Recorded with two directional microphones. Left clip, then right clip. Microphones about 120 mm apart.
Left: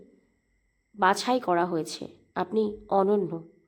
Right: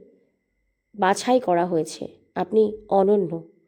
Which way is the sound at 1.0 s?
35° right (ahead or behind).